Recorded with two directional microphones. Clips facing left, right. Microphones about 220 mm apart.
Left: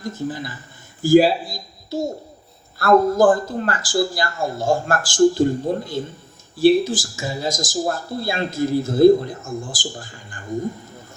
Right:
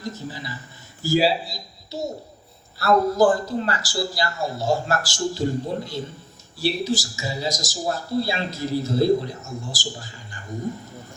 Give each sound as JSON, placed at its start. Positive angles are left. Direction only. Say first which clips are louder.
{"t": 0.0, "sound": "speech", "louder": "left 6 dB", "side_deg": 50}